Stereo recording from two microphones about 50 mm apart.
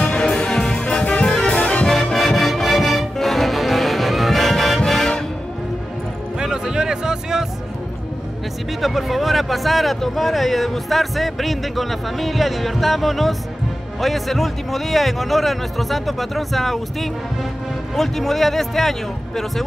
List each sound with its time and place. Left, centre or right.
0.0 s music: centre
1.5 s music: left
2.1 s music: centre
6.4 s music: centre
8.8 s a man's voice: centre